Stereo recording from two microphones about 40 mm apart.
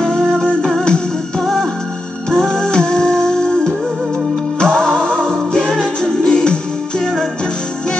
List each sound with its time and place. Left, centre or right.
0.2 s music: centre